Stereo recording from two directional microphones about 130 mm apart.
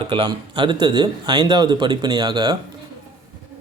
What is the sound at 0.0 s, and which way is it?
A man's voice, 40° right (ahead or behind).